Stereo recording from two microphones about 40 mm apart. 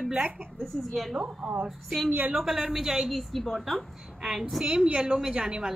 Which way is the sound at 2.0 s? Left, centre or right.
Right.